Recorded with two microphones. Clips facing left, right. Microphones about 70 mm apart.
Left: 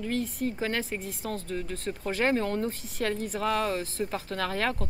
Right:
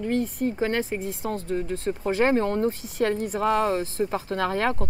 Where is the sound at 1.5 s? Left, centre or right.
Right.